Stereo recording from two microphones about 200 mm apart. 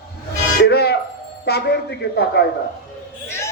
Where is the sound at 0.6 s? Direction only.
55° left (ahead or behind).